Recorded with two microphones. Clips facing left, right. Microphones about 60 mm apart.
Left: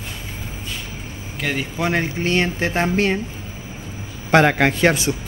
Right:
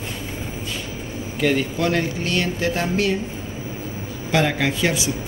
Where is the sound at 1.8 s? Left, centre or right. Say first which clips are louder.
Even; left.